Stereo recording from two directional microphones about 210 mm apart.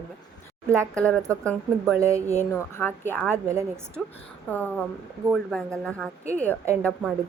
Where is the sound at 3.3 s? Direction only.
15° right (ahead or behind).